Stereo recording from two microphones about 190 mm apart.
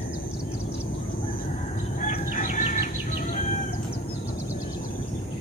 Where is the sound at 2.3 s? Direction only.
40° left (ahead or behind).